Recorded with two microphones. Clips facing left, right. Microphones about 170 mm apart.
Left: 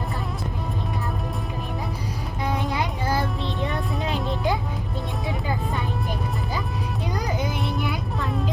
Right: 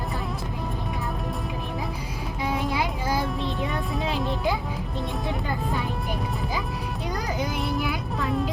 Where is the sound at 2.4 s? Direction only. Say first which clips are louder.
Even; centre (ahead or behind).